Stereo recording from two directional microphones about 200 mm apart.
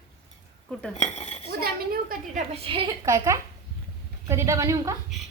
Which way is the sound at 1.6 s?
45° right (ahead or behind).